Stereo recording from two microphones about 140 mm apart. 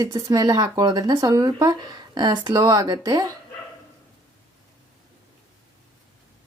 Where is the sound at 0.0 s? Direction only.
25° right (ahead or behind).